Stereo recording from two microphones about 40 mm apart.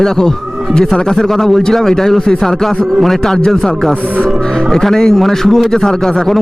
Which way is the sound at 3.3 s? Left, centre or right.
Centre.